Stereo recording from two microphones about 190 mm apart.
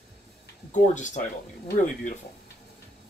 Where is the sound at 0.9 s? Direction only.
40° left (ahead or behind).